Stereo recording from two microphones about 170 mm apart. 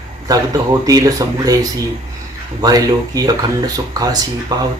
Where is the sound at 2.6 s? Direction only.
20° right (ahead or behind).